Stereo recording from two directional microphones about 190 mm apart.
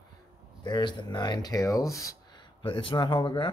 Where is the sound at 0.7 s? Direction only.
25° left (ahead or behind).